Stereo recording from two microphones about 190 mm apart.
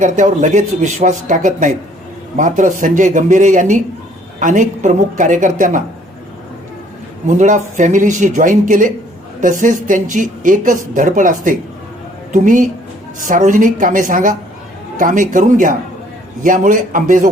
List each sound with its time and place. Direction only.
0.0 s speech: 40° right (ahead or behind)
7.3 s speech: 40° right (ahead or behind)